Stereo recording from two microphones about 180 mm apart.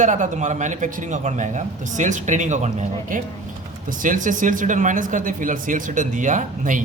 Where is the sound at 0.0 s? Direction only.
45° right (ahead or behind).